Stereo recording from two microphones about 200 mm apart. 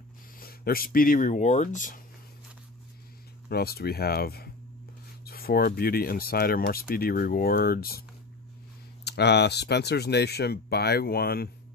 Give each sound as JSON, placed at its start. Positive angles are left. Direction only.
{"t": 0.4, "sound": "speech", "side_deg": 50}
{"t": 3.4, "sound": "speech", "side_deg": 50}
{"t": 9.0, "sound": "speech", "side_deg": 55}